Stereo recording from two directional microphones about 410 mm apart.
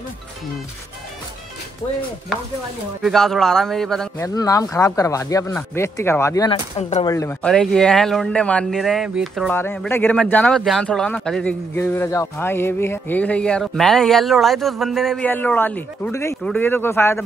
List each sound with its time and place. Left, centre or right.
3.0 s a man's voice: centre